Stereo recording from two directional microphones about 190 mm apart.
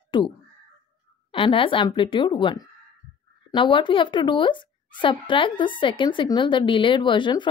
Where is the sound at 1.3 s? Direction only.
25° left (ahead or behind).